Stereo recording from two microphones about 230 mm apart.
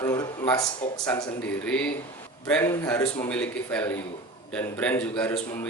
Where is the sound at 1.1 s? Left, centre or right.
Centre.